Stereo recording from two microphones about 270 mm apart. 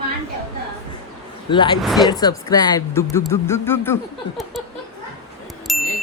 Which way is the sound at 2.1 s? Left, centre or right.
Centre.